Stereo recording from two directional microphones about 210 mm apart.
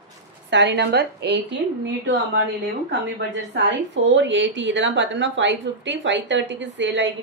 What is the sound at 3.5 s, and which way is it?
A woman's voice, 55° right (ahead or behind).